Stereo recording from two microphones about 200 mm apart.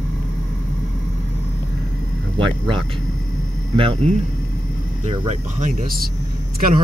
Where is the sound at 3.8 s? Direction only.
25° right (ahead or behind); by 6.8 s 45° right (ahead or behind).